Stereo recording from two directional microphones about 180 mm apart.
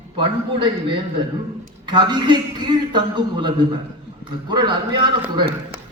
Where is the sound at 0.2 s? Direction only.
30° right (ahead or behind).